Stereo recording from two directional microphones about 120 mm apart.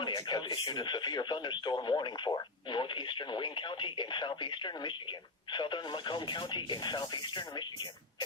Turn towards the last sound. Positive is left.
turn(degrees=40)  # may be behind; listen again after turning